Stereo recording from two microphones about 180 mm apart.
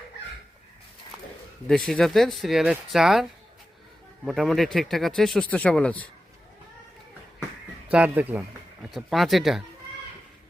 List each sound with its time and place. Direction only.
1.6 s speech: 5° left (ahead or behind)
4.3 s speech: centre (ahead or behind)
7.9 s speech: 10° right (ahead or behind)